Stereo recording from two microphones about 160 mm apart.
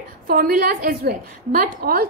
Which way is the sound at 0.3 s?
65° right (ahead or behind).